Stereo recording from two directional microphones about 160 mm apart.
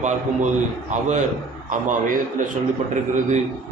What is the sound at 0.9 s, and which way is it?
Speech, 50° right (ahead or behind).